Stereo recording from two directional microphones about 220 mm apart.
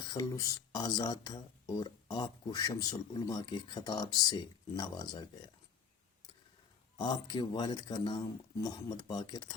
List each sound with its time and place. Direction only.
0.1 s speech: 15° left (ahead or behind)
6.9 s speech: 20° left (ahead or behind)